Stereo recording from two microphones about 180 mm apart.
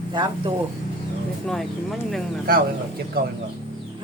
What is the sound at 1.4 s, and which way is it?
Speech, centre (ahead or behind).